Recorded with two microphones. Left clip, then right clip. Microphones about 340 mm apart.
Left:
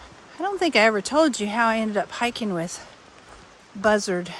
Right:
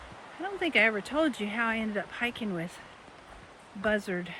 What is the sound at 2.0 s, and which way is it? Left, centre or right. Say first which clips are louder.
Speech: left 8 dB; left.